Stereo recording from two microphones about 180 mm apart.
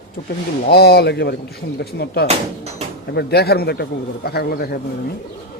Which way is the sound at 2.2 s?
35° right (ahead or behind).